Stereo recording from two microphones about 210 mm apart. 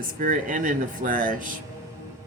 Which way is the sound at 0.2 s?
40° right (ahead or behind).